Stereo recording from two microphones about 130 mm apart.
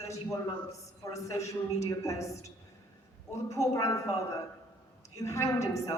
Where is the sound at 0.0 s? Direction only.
25° left (ahead or behind).